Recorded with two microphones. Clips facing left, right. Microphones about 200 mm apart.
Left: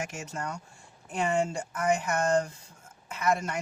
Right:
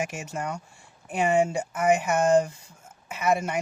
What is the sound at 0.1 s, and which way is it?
Speech, 10° right (ahead or behind).